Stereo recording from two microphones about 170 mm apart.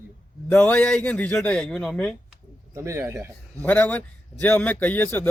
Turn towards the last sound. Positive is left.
turn(degrees=10)  # may be behind; listen again after turning